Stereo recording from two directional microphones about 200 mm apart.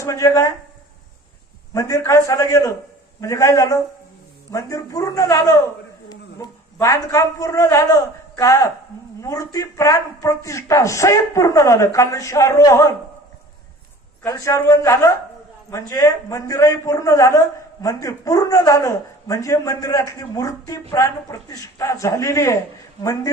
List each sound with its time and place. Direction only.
0.0 s a man's voice: 15° left (ahead or behind)
1.7 s a man's voice: 15° left (ahead or behind)
14.2 s a man's voice: 15° left (ahead or behind)